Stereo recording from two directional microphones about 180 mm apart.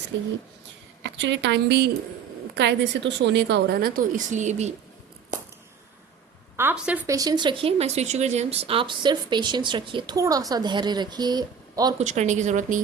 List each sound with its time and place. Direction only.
0.1 s a woman's voice: 90° right; by 4.7 s 40° right (ahead or behind)
6.6 s a woman's voice: 10° right (ahead or behind)
7.1 s speech: 20° right (ahead or behind)
11.9 s speech: 40° right (ahead or behind)